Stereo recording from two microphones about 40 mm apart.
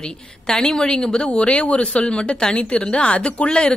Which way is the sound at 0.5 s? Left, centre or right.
Centre.